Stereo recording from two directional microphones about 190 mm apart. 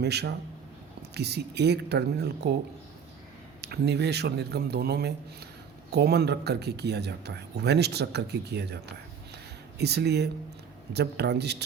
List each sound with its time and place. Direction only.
0.0 s speech: 60° right (ahead or behind)
3.6 s speech: 60° right (ahead or behind)